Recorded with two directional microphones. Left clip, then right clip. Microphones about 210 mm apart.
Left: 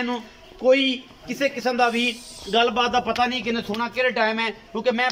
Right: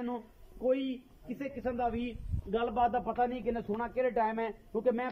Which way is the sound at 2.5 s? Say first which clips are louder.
Left 10 dB; 30° right (ahead or behind).